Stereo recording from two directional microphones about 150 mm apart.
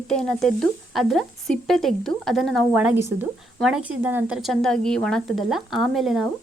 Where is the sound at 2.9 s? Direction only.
20° right (ahead or behind).